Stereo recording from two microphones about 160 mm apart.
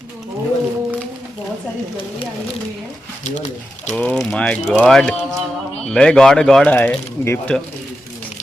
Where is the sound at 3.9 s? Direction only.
5° left (ahead or behind).